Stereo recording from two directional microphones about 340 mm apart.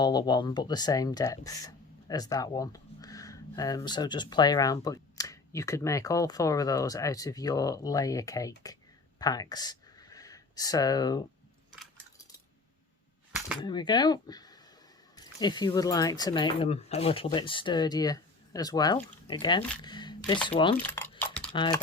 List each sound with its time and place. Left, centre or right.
0.0 s speech: centre
13.6 s speech: centre